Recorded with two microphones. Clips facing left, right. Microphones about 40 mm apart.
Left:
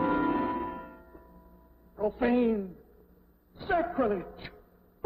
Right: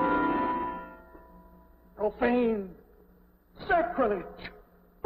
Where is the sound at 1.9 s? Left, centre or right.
Centre.